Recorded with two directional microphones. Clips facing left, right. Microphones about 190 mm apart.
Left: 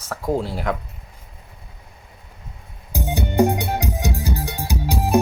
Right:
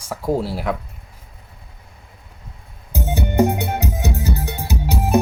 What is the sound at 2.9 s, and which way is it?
Music, 15° left (ahead or behind).